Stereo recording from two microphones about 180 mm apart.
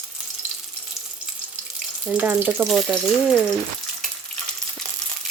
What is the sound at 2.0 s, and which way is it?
Speech, 10° right (ahead or behind).